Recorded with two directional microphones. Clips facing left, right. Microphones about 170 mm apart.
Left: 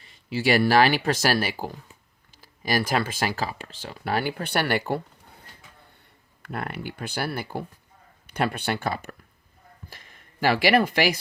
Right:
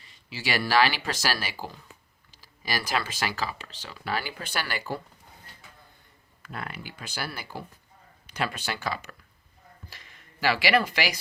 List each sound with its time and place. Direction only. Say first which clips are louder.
0.0 s speech: left 10 dB; 55° left (ahead or behind)
6.4 s speech: left 6 dB; 60° left (ahead or behind)